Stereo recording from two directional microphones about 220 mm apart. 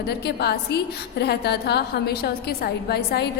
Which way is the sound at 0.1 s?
45° left (ahead or behind).